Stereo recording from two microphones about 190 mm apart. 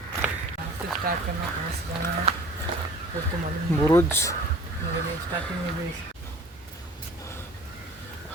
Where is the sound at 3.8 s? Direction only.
10° left (ahead or behind).